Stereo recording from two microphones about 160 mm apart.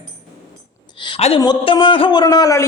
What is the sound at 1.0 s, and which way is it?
A woman's voice, 35° left (ahead or behind).